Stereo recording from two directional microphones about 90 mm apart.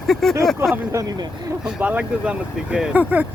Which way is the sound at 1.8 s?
15° right (ahead or behind).